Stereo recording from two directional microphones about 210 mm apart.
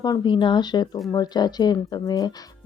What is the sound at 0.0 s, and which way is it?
Speech, 20° left (ahead or behind).